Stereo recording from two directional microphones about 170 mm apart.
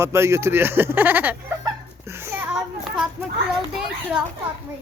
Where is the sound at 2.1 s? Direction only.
15° right (ahead or behind).